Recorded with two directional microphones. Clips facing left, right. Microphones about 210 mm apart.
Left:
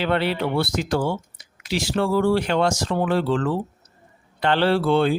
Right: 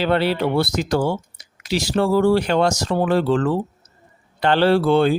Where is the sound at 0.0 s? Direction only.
35° right (ahead or behind).